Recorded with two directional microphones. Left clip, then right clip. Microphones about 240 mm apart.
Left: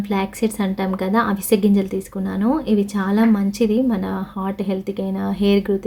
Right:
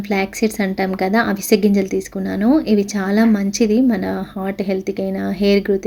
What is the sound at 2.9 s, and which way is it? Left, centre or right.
Speech, left.